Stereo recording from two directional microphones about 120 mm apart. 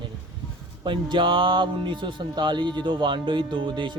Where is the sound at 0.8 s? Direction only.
40° right (ahead or behind).